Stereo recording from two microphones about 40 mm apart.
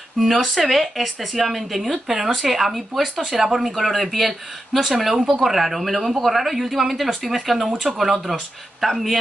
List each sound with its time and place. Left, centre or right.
0.3 s speech: centre